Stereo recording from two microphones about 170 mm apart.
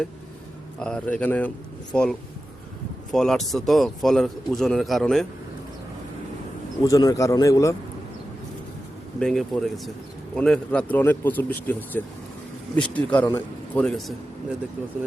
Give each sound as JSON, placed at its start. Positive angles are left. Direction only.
{"t": 0.8, "sound": "speech", "side_deg": 5}
{"t": 6.8, "sound": "a man's voice", "side_deg": 20}
{"t": 9.1, "sound": "speech", "side_deg": 0}